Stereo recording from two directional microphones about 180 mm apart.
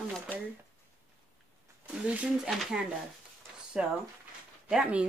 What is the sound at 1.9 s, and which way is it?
Speech, 5° right (ahead or behind).